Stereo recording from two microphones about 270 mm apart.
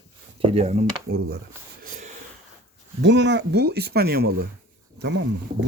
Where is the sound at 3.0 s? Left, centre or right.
Right.